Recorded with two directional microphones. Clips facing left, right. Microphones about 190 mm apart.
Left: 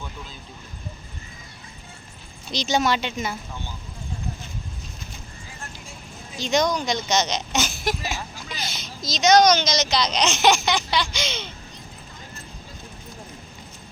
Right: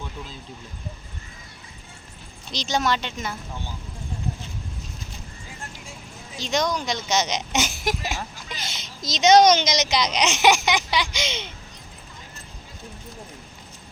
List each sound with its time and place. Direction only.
2.5 s speech: centre (ahead or behind)
6.4 s speech: centre (ahead or behind); by 11.5 s 20° right (ahead or behind)